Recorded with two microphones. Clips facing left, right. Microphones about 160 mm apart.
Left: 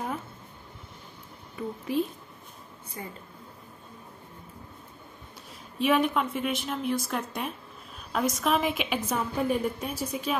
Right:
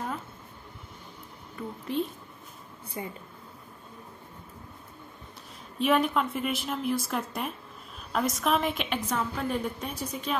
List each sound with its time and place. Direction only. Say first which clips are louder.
1.9 s speech: left 2 dB; 5° left (ahead or behind)
3.0 s speech: right 3 dB; 20° right (ahead or behind)
5.8 s a woman's voice: even; centre (ahead or behind)